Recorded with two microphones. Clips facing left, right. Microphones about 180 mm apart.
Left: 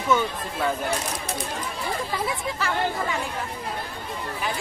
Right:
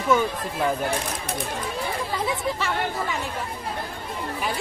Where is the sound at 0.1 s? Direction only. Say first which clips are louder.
Right 2 dB; 10° right (ahead or behind).